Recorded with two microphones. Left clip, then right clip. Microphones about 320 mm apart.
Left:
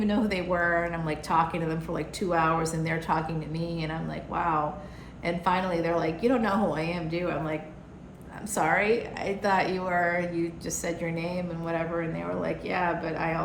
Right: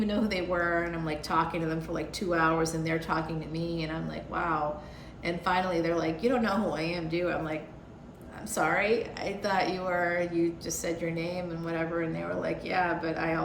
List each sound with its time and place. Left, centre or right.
0.0 s a woman's voice: centre
8.5 s a woman's voice: centre